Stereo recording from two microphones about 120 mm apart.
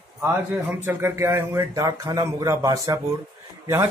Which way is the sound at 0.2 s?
20° right (ahead or behind).